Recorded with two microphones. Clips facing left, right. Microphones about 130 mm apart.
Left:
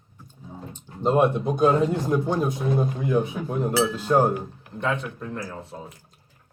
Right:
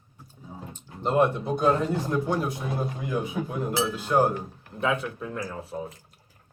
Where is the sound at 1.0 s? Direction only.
15° left (ahead or behind).